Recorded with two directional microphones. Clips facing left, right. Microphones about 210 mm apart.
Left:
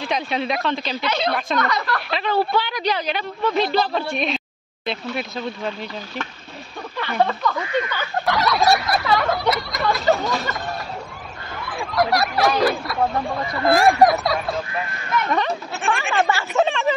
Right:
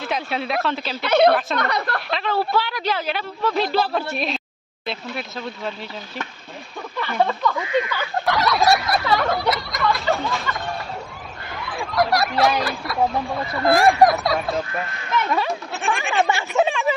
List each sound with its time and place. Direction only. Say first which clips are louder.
0.1 s speech: left 1 dB; 5° right (ahead or behind)
1.0 s speech: right 9 dB; 55° right (ahead or behind)
2.0 s speech: left 4 dB; centre (ahead or behind)
7.1 s speech: even; 10° right (ahead or behind)
8.3 s snicker: even; centre (ahead or behind)
10.5 s a sound: even; 40° left (ahead or behind)
11.6 s speech: even; centre (ahead or behind)
16.3 s speech: even; 15° right (ahead or behind)